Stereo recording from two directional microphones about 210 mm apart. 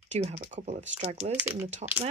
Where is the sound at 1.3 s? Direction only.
10° right (ahead or behind).